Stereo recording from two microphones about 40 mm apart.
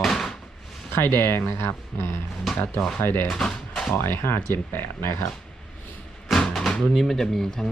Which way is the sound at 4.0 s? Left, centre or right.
Left.